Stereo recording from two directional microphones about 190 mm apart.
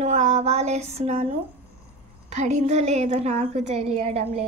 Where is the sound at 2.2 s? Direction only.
35° right (ahead or behind).